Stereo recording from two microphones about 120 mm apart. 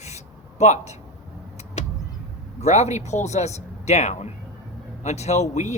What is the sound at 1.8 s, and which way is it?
Vehicle, 70° left (ahead or behind).